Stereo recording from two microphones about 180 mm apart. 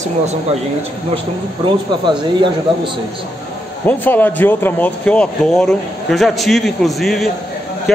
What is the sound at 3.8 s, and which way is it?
Speech, 10° left (ahead or behind).